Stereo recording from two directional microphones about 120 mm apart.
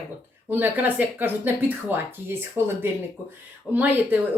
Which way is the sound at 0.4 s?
15° right (ahead or behind).